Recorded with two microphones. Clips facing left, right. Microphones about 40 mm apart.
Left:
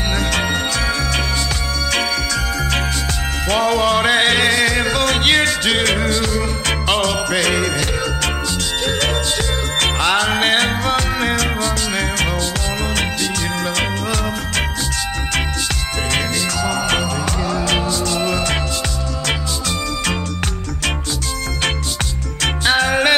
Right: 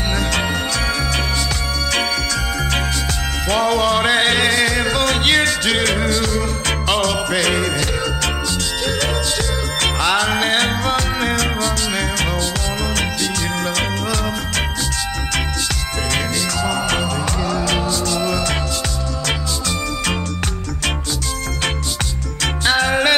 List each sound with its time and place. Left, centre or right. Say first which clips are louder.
3.4 s music: left 1 dB; centre
8.8 s music: left 1 dB; left
9.8 s music: left 1 dB; centre
16.6 s music: left 1 dB; centre
17.0 s music: even; centre
17.8 s music: even; left
22.7 s music: left 1 dB; centre